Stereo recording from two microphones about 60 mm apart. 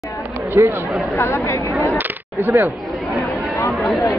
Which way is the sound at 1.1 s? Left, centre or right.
Left.